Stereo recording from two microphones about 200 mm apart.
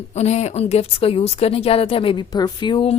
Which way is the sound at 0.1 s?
35° left (ahead or behind).